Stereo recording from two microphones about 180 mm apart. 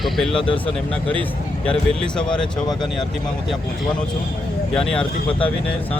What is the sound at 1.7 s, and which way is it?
Speech, 5° left (ahead or behind).